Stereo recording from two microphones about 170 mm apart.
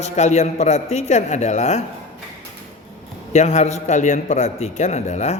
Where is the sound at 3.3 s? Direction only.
45° left (ahead or behind).